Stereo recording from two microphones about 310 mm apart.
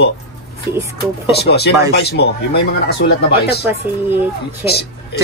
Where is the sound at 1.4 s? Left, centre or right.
Left.